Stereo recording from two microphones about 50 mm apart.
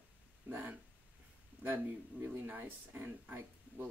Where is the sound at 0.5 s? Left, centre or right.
Right.